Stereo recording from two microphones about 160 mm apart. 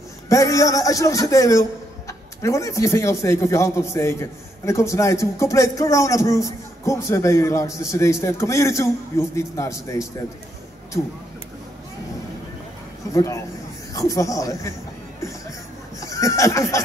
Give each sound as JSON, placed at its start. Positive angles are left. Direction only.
{"t": 0.3, "sound": "a man's voice", "side_deg": 20}
{"t": 13.1, "sound": "a man's voice", "side_deg": 20}
{"t": 16.0, "sound": "a sound", "side_deg": 20}